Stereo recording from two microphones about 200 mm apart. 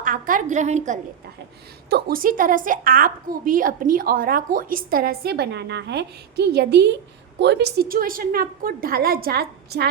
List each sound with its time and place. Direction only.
0.0 s a woman's voice: 40° right (ahead or behind)
1.9 s a woman's voice: 45° right (ahead or behind)